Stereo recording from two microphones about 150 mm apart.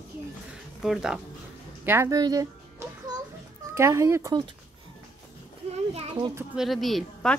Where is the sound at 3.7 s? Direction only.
20° right (ahead or behind).